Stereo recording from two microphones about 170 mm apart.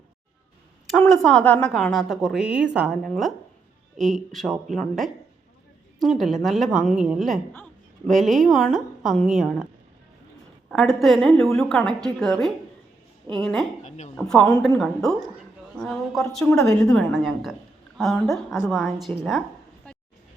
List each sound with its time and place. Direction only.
0.9 s a woman's voice: 5° left (ahead or behind)
10.7 s a woman's voice: centre (ahead or behind)
13.8 s a sound: 45° left (ahead or behind)
14.2 s a woman's voice: 5° left (ahead or behind)